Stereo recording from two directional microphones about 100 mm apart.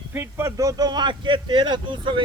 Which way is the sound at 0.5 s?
35° right (ahead or behind).